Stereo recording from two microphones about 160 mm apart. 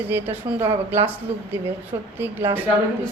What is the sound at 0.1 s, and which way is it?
A woman's voice, 15° right (ahead or behind).